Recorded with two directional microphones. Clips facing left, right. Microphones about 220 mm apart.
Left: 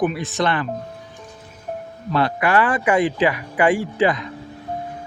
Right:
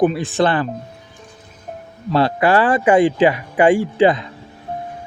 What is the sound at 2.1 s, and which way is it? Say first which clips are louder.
Speech: right 4 dB; 30° right (ahead or behind).